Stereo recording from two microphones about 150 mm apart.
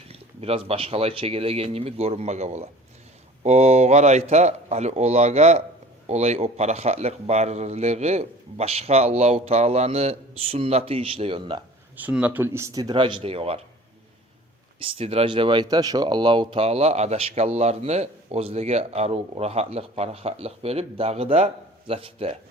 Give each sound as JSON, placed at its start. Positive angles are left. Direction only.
{"t": 0.1, "sound": "a man's voice", "side_deg": -40}
{"t": 11.9, "sound": "speech", "side_deg": -10}
{"t": 14.8, "sound": "speech", "side_deg": -40}